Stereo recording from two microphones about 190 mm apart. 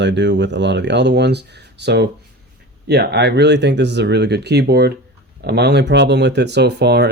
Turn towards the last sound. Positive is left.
turn(degrees=-60)  # may be behind; listen again after turning